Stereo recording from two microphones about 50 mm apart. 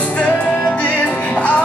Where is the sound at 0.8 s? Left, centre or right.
Left.